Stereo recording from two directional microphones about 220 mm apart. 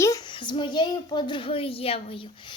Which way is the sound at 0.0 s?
15° left (ahead or behind).